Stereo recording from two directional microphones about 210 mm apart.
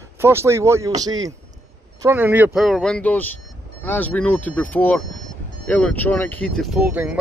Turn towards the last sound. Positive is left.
turn(degrees=-5)  # may be behind; listen again after turning